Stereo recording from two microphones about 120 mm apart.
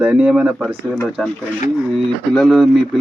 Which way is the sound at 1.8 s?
Centre (ahead or behind).